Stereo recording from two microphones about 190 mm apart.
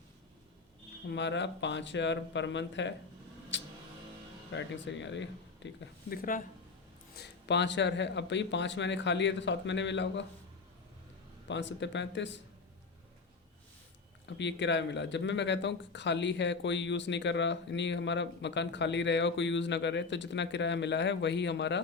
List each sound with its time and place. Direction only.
1.0 s speech: 70° left (ahead or behind)
3.5 s vehicle: 75° left (ahead or behind)
4.5 s speech: 70° left (ahead or behind)
7.2 s speech: 65° left (ahead or behind)
11.4 s speech: 70° left (ahead or behind)
14.3 s speech: 70° left (ahead or behind)